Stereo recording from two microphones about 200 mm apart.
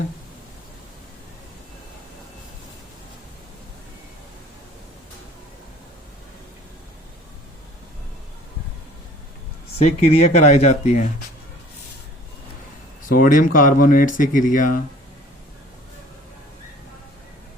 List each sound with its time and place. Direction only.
9.7 s speech: 35° left (ahead or behind)
13.1 s speech: 45° left (ahead or behind)